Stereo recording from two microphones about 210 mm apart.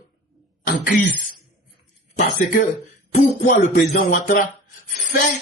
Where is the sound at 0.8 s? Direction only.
40° left (ahead or behind).